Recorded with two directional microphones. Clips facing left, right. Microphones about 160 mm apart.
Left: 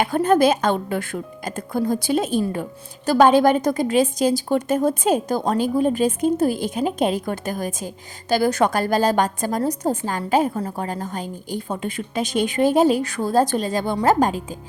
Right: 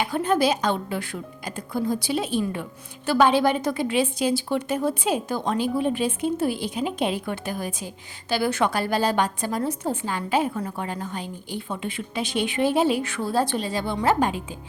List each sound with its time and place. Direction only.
0.0 s a woman's voice: 50° left (ahead or behind)